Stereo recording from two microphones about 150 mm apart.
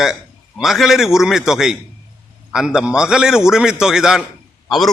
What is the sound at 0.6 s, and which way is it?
A man's voice, centre (ahead or behind).